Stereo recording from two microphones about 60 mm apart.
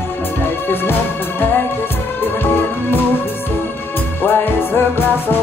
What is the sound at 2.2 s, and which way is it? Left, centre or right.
Music, left.